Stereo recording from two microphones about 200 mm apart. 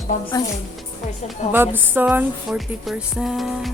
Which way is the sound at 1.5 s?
10° right (ahead or behind).